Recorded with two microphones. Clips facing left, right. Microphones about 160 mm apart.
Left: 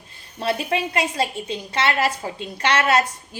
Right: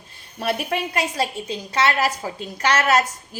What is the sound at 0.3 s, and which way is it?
A woman's voice, 30° left (ahead or behind).